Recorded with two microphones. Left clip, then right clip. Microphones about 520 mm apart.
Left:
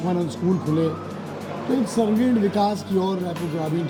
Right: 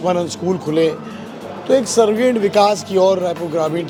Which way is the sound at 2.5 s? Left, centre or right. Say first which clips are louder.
Right 9 dB; right.